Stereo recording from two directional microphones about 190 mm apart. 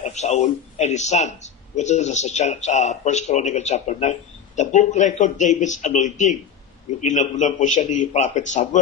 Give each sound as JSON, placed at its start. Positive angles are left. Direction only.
{"t": 0.0, "sound": "speech", "side_deg": 35}